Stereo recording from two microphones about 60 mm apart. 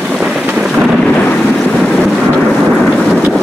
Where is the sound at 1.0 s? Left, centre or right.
Left.